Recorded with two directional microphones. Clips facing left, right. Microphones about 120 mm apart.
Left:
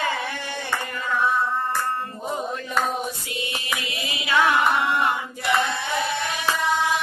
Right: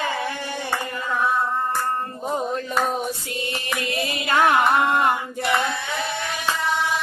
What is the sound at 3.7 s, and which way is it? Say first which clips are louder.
Chant: right 8 dB; 55° right (ahead or behind).